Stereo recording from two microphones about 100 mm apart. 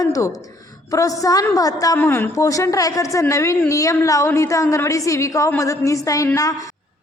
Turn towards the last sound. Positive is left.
turn(degrees=35)  # may be behind; listen again after turning